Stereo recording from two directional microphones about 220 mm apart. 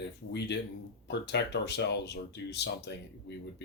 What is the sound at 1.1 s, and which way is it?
Speech, 50° left (ahead or behind).